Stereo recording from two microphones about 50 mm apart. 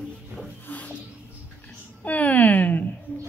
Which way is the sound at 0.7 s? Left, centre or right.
Left.